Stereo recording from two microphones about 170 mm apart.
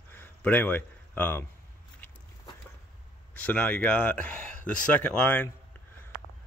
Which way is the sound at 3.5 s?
5° left (ahead or behind).